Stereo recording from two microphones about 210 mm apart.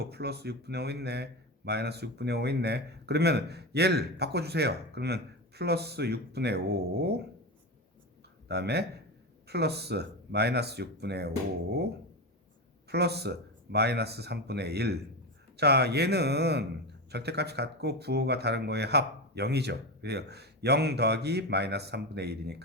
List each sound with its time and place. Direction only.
0.0 s speech: 50° right (ahead or behind)
8.4 s speech: 50° right (ahead or behind)
12.9 s speech: 50° right (ahead or behind)